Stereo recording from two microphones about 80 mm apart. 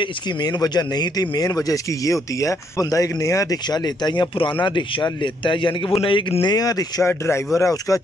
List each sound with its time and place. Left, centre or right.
0.0 s speech: left
4.6 s a man's voice: left
6.5 s speech: left
7.0 s speech: left